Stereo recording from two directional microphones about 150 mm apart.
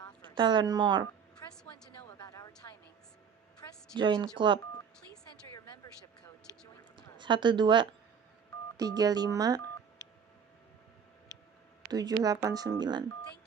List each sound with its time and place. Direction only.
0.3 s speech: 30° right (ahead or behind)
2.1 s a sound: 25° left (ahead or behind)
3.9 s speech: 30° right (ahead or behind)
6.9 s a sound: 30° right (ahead or behind)
8.8 s speech: 25° right (ahead or behind)
11.9 s speech: 25° right (ahead or behind)